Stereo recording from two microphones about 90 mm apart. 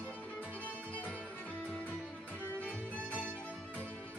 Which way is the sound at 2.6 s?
15° left (ahead or behind).